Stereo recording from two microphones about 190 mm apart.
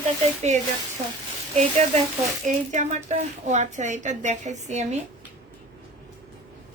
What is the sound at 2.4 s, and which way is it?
Speech, 40° right (ahead or behind).